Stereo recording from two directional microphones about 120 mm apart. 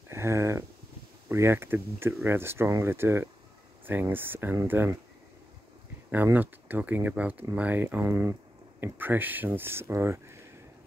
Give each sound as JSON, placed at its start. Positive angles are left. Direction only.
{"t": 0.1, "sound": "a sound", "side_deg": -25}
{"t": 1.3, "sound": "speech", "side_deg": -20}
{"t": 6.1, "sound": "speech", "side_deg": -15}